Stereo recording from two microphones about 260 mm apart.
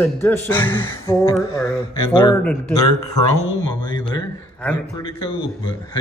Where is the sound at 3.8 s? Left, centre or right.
Centre.